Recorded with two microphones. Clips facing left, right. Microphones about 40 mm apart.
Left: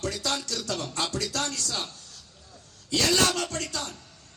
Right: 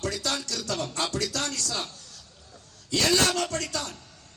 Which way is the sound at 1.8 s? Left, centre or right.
Left.